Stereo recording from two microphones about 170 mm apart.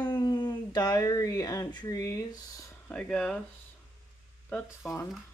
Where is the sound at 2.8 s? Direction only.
5° left (ahead or behind).